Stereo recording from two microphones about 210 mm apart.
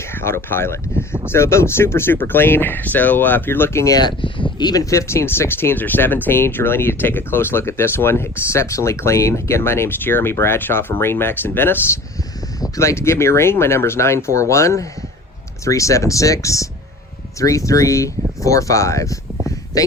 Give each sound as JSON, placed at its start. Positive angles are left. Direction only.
{"t": 0.0, "sound": "speech", "side_deg": 10}